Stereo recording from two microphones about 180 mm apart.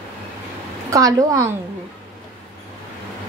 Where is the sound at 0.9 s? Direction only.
15° right (ahead or behind).